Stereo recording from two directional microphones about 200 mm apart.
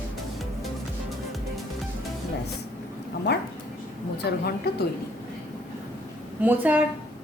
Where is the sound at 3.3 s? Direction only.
55° left (ahead or behind).